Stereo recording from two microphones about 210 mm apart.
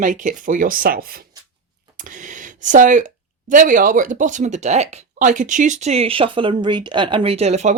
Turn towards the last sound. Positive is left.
turn(degrees=-30)  # may be behind; listen again after turning